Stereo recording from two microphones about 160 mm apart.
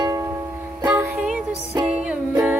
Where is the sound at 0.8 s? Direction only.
10° right (ahead or behind).